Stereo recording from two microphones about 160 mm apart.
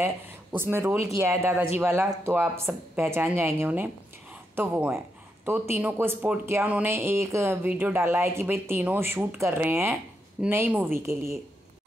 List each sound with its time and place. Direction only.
0.6 s speech: 15° right (ahead or behind)